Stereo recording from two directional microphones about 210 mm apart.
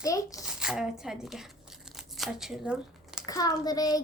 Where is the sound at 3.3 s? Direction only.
15° left (ahead or behind).